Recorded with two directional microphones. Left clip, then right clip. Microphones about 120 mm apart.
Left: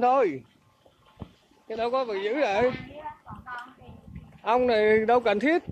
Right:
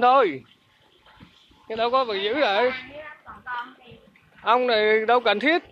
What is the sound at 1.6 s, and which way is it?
A man's voice, 10° right (ahead or behind).